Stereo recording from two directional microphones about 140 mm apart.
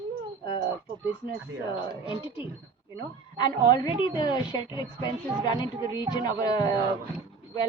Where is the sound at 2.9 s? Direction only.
30° left (ahead or behind).